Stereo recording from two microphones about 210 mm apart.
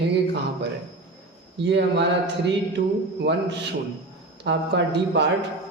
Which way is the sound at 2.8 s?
40° right (ahead or behind).